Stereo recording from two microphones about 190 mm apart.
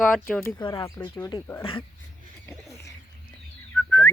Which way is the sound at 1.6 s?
30° left (ahead or behind).